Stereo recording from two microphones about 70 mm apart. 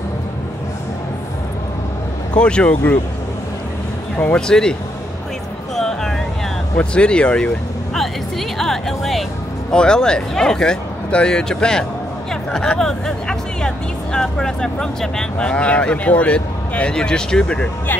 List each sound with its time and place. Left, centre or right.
2.3 s speech: centre
4.5 s speech: centre
5.8 s a sound: centre
6.8 s speech: centre
8.5 s speech: centre